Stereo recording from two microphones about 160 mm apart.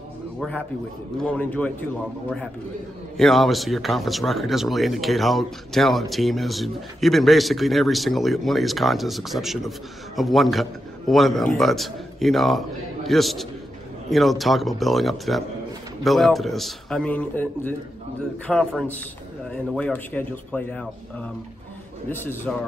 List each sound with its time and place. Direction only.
1.2 s speech: 10° left (ahead or behind)
3.2 s speech: centre (ahead or behind)
22.1 s speech: 15° left (ahead or behind)